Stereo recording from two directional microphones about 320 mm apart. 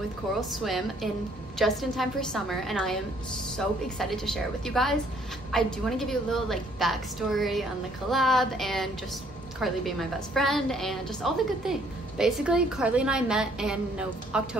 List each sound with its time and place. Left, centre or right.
0.5 s a woman's voice: centre